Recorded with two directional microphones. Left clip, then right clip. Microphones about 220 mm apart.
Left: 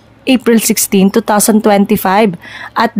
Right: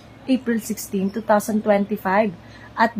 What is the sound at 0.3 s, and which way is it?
A woman's voice, 50° left (ahead or behind).